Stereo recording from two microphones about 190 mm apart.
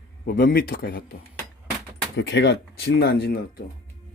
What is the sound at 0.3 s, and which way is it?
Speech, 50° left (ahead or behind).